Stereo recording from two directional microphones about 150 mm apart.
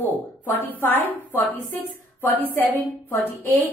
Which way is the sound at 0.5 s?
15° left (ahead or behind).